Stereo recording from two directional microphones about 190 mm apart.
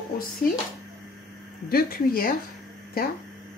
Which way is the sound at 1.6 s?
50° left (ahead or behind).